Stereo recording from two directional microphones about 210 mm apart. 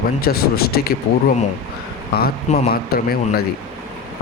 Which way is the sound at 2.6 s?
45° left (ahead or behind).